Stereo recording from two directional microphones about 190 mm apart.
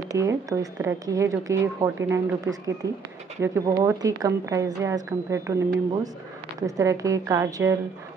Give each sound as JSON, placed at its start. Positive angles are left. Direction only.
{"t": 0.1, "sound": "a woman's voice", "side_deg": -15}